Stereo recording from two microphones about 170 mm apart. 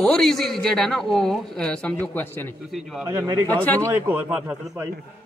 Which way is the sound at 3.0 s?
20° right (ahead or behind).